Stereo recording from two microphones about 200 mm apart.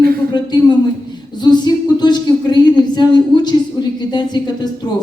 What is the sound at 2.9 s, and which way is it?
A woman's voice, 20° left (ahead or behind).